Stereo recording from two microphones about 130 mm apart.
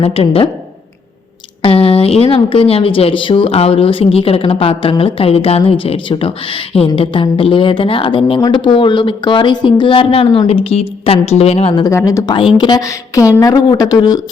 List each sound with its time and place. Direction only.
0.0 s speech: 50° left (ahead or behind)
1.6 s speech: 45° left (ahead or behind)
11.9 s a woman's voice: 20° left (ahead or behind)